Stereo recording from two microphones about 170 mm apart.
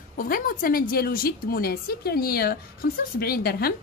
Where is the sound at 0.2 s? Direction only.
55° left (ahead or behind).